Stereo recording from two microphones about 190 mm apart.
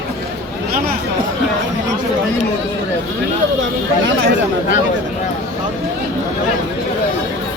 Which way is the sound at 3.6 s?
85° right.